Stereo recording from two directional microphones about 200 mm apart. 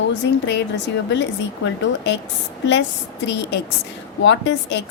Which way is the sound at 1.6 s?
60° left (ahead or behind).